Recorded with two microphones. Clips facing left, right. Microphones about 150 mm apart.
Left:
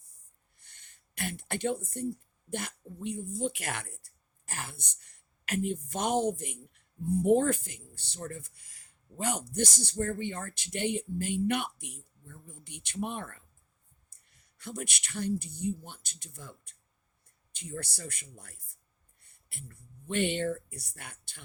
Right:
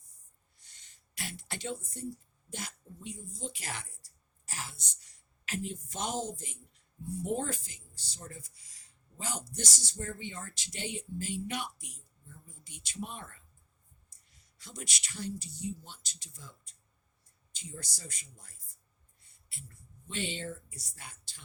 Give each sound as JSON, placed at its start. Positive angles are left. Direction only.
{"t": 0.5, "sound": "speech", "side_deg": 55}